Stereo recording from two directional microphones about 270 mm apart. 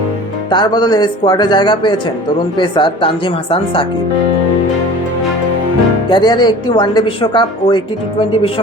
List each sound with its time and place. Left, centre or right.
0.5 s speech: centre
6.1 s speech: centre